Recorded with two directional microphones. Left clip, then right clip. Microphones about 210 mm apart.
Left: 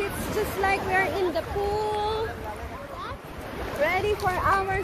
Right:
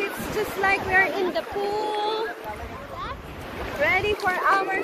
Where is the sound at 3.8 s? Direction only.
15° left (ahead or behind).